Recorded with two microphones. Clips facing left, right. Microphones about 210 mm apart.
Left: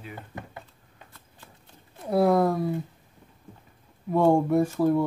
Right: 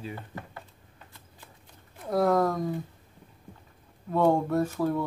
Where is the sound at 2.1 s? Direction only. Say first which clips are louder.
Left 3 dB; 10° left (ahead or behind).